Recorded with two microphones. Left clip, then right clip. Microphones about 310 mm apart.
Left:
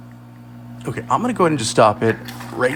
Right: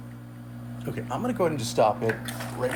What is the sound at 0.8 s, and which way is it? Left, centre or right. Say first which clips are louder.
Speech: left 12 dB; left.